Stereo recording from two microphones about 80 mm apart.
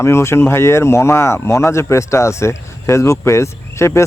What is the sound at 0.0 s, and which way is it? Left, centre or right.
Speech, left.